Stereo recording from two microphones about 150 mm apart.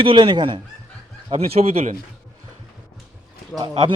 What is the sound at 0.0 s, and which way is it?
A man's voice, 35° right (ahead or behind).